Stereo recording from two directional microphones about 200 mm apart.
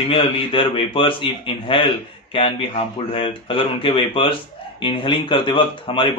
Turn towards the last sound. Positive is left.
turn(degrees=25)  # may be behind; listen again after turning